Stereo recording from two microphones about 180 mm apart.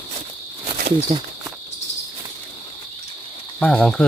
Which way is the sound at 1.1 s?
35° right (ahead or behind).